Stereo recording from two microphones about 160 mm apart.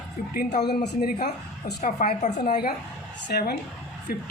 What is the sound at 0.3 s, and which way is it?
Speech, 80° left.